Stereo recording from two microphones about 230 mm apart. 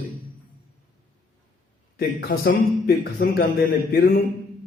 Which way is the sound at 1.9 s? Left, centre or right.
Left.